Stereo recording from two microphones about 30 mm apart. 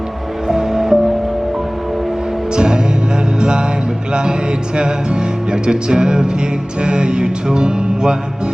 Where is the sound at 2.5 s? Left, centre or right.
Right.